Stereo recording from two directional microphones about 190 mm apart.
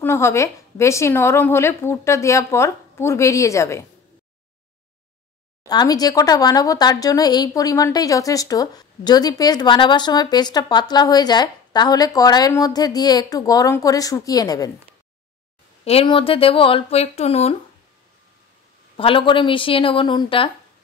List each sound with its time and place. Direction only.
0.0 s a woman's voice: 15° left (ahead or behind)
5.7 s speech: 20° left (ahead or behind)
15.8 s speech: 30° left (ahead or behind)
18.9 s speech: 30° left (ahead or behind)